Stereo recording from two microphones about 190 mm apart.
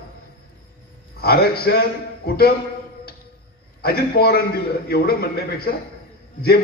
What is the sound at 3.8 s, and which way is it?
A man's voice, 55° left (ahead or behind).